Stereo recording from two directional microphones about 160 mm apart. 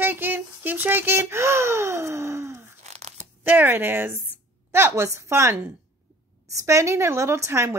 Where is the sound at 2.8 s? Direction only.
45° right (ahead or behind).